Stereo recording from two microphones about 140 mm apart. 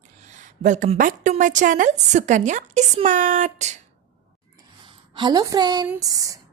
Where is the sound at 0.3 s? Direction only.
60° right (ahead or behind).